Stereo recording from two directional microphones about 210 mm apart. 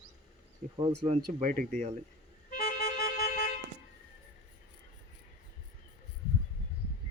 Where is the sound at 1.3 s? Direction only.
40° right (ahead or behind).